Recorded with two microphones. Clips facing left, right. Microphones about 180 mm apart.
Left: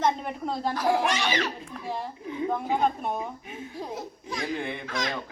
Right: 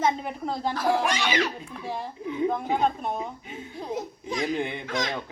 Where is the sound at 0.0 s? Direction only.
5° right (ahead or behind).